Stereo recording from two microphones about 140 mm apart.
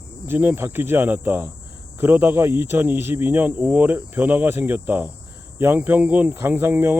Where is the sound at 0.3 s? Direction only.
15° right (ahead or behind).